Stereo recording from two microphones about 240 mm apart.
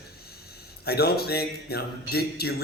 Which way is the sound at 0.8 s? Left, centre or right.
Left.